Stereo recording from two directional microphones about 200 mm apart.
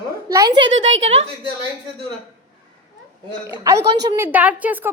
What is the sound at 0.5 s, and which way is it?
Speech, 70° right (ahead or behind).